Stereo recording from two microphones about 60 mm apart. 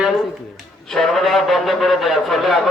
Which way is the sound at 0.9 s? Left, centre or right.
Centre.